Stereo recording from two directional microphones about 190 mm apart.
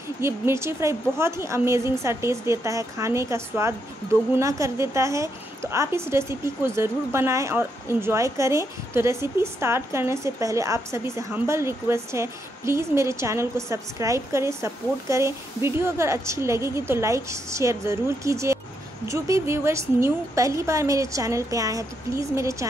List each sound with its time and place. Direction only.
0.2 s a woman's voice: 15° right (ahead or behind)